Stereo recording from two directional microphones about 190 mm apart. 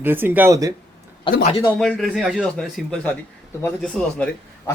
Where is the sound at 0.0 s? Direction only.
10° right (ahead or behind).